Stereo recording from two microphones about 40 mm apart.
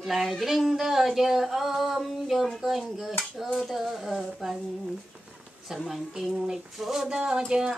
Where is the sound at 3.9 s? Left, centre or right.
Centre.